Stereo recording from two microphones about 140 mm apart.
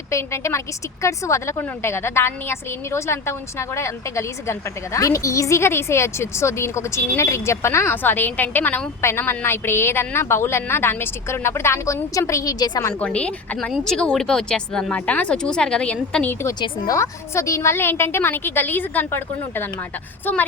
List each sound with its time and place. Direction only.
0.1 s a woman's voice: 20° left (ahead or behind)
12.9 s speech: 10° left (ahead or behind)
16.6 s a woman's voice: 30° left (ahead or behind); by 20.4 s 15° left (ahead or behind)